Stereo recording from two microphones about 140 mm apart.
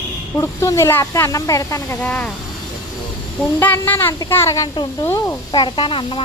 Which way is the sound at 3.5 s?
15° left (ahead or behind).